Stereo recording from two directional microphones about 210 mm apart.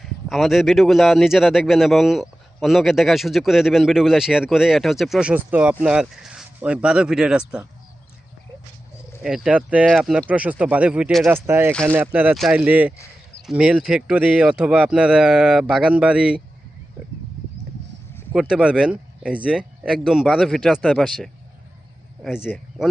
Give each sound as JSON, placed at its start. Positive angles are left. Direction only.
{"t": 0.0, "sound": "a man's voice", "side_deg": 0}
{"t": 9.2, "sound": "speech", "side_deg": 0}
{"t": 11.7, "sound": "a man's voice", "side_deg": 5}
{"t": 11.9, "sound": "a man's voice", "side_deg": -10}
{"t": 18.3, "sound": "a man's voice", "side_deg": -5}
{"t": 22.4, "sound": "speech", "side_deg": 5}